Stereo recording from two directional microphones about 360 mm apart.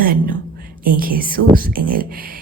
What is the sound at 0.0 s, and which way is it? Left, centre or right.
Speech, right.